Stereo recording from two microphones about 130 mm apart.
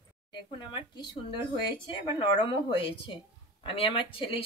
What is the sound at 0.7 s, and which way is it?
Speech, 35° left (ahead or behind).